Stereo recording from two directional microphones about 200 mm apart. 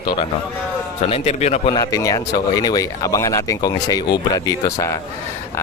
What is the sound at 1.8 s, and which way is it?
Speech, 15° left (ahead or behind).